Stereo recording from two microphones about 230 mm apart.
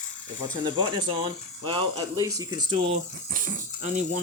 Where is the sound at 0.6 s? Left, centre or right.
Centre.